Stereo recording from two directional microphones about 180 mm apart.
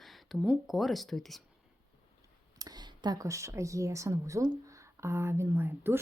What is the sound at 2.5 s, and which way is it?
Speech, 20° right (ahead or behind).